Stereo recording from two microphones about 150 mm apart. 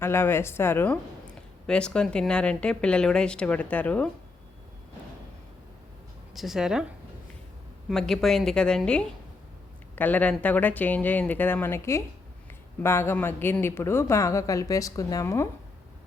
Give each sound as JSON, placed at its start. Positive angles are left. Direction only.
{"t": 0.0, "sound": "a woman's voice", "side_deg": 15}
{"t": 6.3, "sound": "a woman's voice", "side_deg": 0}
{"t": 7.9, "sound": "a woman's voice", "side_deg": 5}